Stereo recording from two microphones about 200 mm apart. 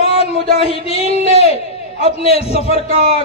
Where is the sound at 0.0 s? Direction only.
30° left (ahead or behind).